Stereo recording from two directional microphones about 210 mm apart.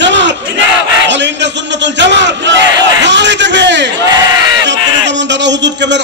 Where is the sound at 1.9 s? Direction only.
55° right (ahead or behind).